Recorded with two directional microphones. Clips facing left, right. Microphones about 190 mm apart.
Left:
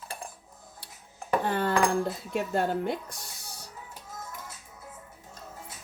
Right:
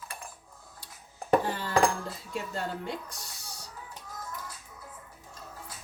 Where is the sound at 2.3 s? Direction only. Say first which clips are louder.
Left 5 dB; 55° left (ahead or behind).